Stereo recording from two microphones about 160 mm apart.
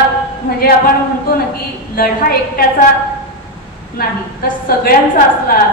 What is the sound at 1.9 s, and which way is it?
Speech, 70° left (ahead or behind).